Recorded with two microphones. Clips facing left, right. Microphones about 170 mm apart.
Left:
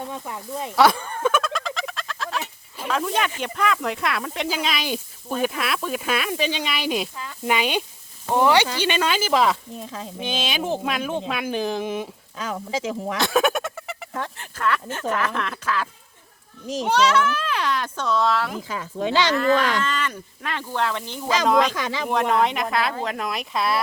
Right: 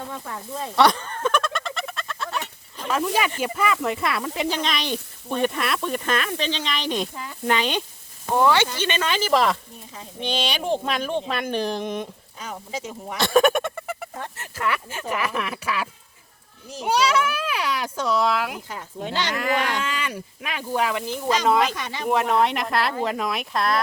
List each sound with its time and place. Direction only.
0.1 s speech: 15° left (ahead or behind)
0.8 s bird: 5° left (ahead or behind)
2.9 s speech: 5° right (ahead or behind)
9.7 s speech: 90° left
10.2 s speech: centre (ahead or behind)
12.4 s speech: 90° left
13.1 s a sound: centre (ahead or behind)
14.3 s a child's voice: 5° right (ahead or behind)
18.7 s speech: 90° left
19.8 s a child's voice: 10° right (ahead or behind)
21.8 s speech: 90° left
22.1 s speech: centre (ahead or behind)